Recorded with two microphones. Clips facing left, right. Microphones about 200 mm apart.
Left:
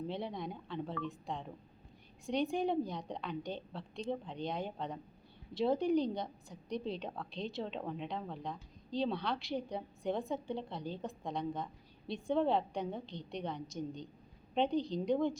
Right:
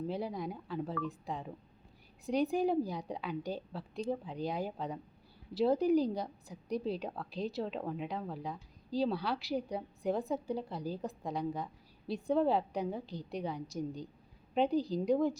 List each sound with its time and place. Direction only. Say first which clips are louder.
0.1 s a woman's voice: right 3 dB; 5° right (ahead or behind)